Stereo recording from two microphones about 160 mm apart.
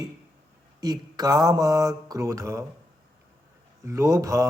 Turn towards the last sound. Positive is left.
turn(degrees=-20)  # may be behind; listen again after turning